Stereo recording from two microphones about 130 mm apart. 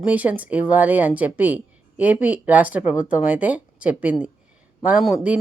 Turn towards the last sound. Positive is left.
turn(degrees=-5)  # may be behind; listen again after turning